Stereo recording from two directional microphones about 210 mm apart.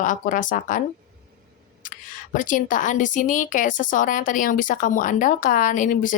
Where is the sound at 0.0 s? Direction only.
40° left (ahead or behind).